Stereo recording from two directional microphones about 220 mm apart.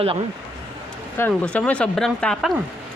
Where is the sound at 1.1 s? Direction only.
10° left (ahead or behind).